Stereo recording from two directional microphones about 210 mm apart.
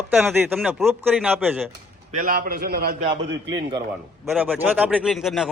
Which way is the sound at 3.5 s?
20° right (ahead or behind).